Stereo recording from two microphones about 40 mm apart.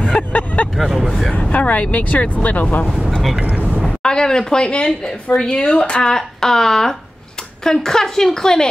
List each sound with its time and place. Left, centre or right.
0.0 s vehicle: left
0.7 s vehicle: centre
1.5 s speech: left
3.3 s speech: right
3.8 s a woman's voice: centre
6.1 s a woman's voice: centre